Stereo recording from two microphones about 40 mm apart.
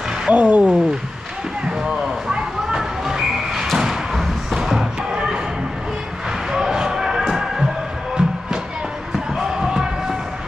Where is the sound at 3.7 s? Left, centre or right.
Centre.